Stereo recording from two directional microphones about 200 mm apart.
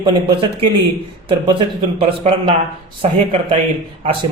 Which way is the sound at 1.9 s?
30° right (ahead or behind).